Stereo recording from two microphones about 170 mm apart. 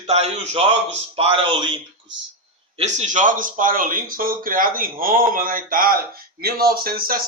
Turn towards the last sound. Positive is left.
turn(degrees=-60)  # may be behind; listen again after turning